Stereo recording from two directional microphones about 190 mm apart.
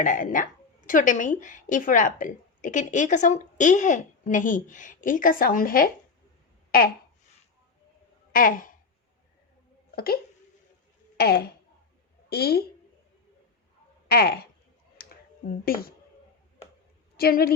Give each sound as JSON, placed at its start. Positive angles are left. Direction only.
{"t": 0.0, "sound": "a woman's voice", "side_deg": 45}
{"t": 6.7, "sound": "a sound", "side_deg": 50}
{"t": 8.3, "sound": "speech", "side_deg": 45}
{"t": 9.9, "sound": "a sound", "side_deg": 55}
{"t": 11.2, "sound": "speech", "side_deg": 55}
{"t": 14.1, "sound": "speech", "side_deg": 55}
{"t": 14.9, "sound": "clicking", "side_deg": 50}
{"t": 17.2, "sound": "a woman's voice", "side_deg": 55}